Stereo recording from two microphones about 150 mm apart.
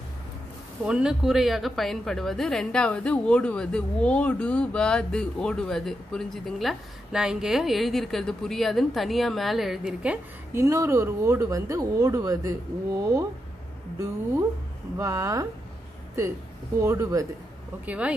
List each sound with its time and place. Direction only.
0.8 s a woman's voice: 5° right (ahead or behind)
10.6 s speech: 20° right (ahead or behind)
15.0 s speech: 20° right (ahead or behind)
16.8 s speech: 20° right (ahead or behind)
17.8 s speech: 10° right (ahead or behind)